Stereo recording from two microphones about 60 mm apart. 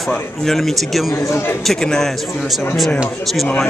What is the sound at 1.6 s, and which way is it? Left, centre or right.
Speech, centre.